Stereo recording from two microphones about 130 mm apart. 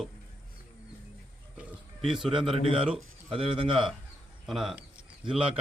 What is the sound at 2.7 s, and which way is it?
Speech, 45° right (ahead or behind).